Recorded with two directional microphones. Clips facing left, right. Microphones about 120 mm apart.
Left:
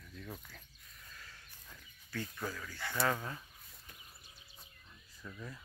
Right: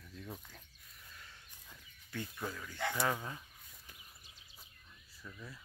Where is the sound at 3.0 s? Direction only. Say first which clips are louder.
Left 4 dB; 10° right (ahead or behind).